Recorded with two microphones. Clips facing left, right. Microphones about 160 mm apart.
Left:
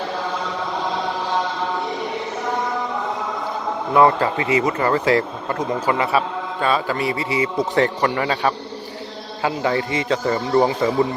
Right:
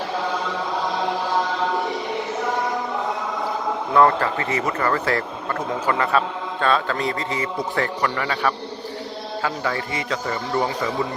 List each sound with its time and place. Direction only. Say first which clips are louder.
3.9 s speech: left 2 dB; 15° left (ahead or behind)
7.8 s a man's voice: left 5 dB; 25° left (ahead or behind)